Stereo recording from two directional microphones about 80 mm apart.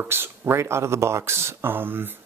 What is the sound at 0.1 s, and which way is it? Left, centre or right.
Speech, right.